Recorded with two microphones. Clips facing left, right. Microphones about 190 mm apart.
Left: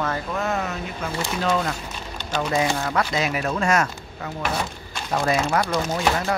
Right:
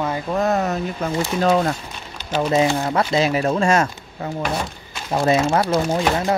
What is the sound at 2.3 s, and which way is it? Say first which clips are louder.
Speech: right 5 dB; 25° right (ahead or behind).